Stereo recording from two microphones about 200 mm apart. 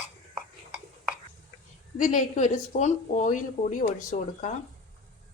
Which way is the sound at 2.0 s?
40° left (ahead or behind).